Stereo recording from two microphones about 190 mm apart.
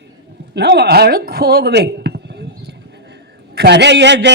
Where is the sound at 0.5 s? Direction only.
60° right (ahead or behind).